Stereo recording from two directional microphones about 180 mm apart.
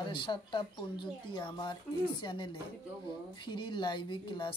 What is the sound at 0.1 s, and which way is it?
Speech, 25° left (ahead or behind).